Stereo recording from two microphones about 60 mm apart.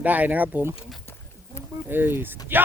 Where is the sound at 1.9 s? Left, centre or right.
Right.